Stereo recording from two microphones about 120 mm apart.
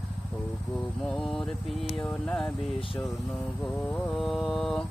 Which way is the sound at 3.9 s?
Centre (ahead or behind).